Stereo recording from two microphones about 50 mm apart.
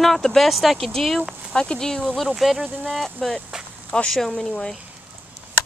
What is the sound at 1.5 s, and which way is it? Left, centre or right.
Speech, centre.